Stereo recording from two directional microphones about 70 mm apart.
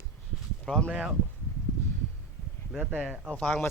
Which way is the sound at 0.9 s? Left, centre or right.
Centre.